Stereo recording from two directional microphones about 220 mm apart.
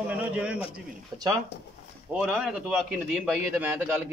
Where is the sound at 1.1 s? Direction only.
20° right (ahead or behind).